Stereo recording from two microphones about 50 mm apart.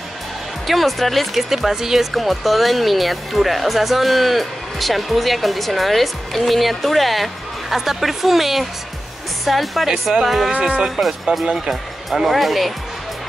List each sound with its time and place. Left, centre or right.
0.7 s speech: centre
10.6 s speech: centre